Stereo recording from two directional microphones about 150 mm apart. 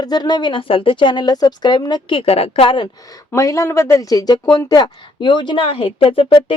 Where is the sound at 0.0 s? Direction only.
30° left (ahead or behind).